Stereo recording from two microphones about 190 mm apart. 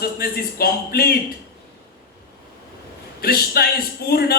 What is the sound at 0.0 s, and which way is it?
Speech, 55° left (ahead or behind).